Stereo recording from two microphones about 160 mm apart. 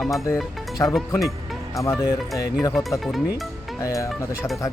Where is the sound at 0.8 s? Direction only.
15° left (ahead or behind).